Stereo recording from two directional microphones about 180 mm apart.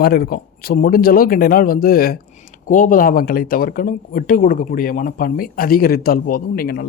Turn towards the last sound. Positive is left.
turn(degrees=55)  # may be behind; listen again after turning